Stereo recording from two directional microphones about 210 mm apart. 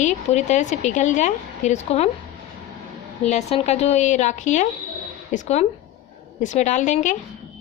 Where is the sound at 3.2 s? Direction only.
30° left (ahead or behind).